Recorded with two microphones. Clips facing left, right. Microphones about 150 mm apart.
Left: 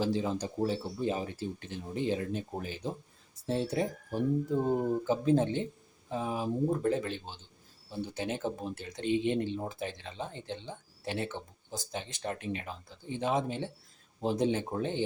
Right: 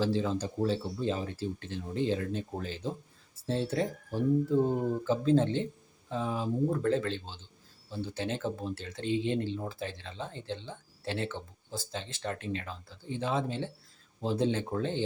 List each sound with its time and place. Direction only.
0.0 s speech: 15° left (ahead or behind)